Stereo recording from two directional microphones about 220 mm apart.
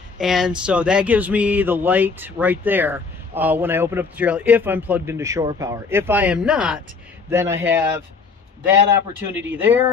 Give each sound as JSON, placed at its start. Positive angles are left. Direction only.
{"t": 0.2, "sound": "speech", "side_deg": 0}
{"t": 9.4, "sound": "speech", "side_deg": -10}